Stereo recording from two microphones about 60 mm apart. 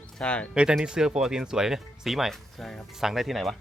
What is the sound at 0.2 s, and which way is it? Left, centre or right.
Speech, centre.